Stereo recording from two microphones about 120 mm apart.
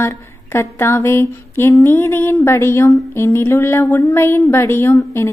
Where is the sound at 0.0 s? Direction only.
20° left (ahead or behind).